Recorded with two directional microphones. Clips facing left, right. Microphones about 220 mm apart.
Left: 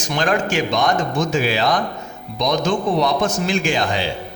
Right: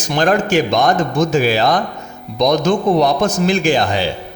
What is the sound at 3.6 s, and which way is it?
Speech, 35° right (ahead or behind).